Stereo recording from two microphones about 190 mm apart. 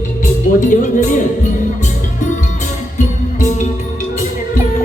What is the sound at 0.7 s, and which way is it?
Music, 40° left (ahead or behind).